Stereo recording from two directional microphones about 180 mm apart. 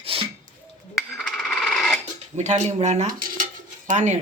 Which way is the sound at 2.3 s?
40° right (ahead or behind).